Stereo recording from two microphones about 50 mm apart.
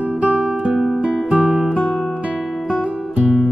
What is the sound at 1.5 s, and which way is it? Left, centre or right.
Music, centre.